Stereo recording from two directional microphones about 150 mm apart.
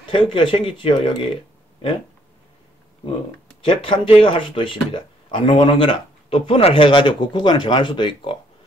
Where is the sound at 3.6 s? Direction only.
35° left (ahead or behind).